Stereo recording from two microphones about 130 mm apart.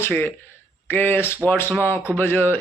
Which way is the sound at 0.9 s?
15° left (ahead or behind).